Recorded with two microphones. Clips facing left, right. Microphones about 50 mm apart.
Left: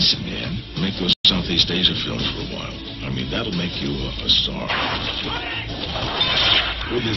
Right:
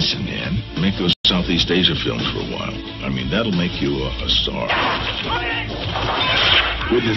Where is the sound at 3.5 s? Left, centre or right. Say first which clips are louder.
Right 5 dB; right.